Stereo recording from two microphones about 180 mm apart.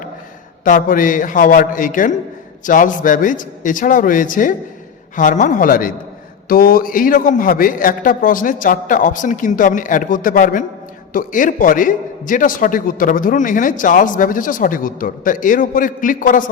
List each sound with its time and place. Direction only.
0.6 s a man's voice: 50° left (ahead or behind)